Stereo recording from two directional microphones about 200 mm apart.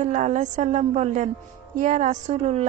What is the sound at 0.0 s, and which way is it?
A woman's voice, 40° right (ahead or behind).